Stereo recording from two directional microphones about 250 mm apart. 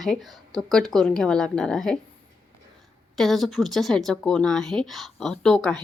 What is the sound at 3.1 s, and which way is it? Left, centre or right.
Speech, centre.